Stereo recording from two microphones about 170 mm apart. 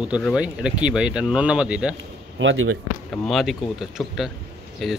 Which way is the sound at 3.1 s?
Centre (ahead or behind).